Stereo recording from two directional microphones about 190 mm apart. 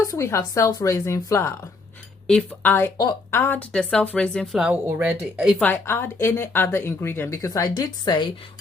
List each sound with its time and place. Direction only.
0.1 s a woman's voice: 15° left (ahead or behind); by 5.6 s 5° right (ahead or behind)
5.6 s speech: 10° left (ahead or behind)